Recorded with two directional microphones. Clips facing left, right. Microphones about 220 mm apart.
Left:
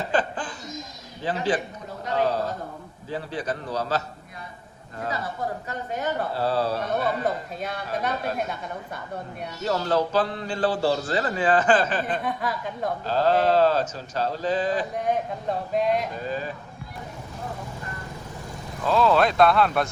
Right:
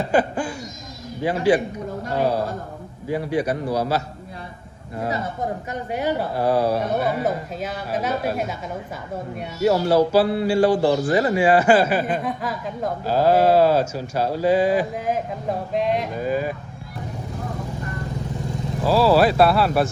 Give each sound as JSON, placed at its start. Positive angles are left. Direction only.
{"t": 0.1, "sound": "laughter", "side_deg": -10}
{"t": 1.2, "sound": "speech", "side_deg": -10}
{"t": 3.1, "sound": "speech", "side_deg": -15}
{"t": 5.6, "sound": "speech", "side_deg": -10}
{"t": 9.6, "sound": "speech", "side_deg": -10}
{"t": 13.1, "sound": "speech", "side_deg": -10}
{"t": 16.2, "sound": "speech", "side_deg": -10}
{"t": 18.9, "sound": "speech", "side_deg": -5}